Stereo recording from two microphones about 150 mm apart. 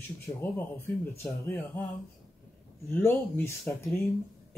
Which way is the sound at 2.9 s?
15° left (ahead or behind).